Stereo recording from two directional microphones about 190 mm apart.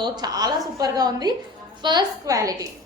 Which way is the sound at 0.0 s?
20° right (ahead or behind).